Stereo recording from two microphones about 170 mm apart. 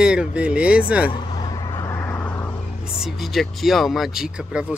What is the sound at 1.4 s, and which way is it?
Vehicle, 20° left (ahead or behind).